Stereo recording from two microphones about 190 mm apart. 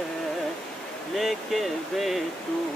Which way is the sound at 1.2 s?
Centre (ahead or behind).